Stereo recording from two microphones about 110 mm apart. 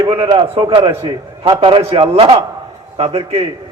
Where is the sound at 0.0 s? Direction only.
45° right (ahead or behind).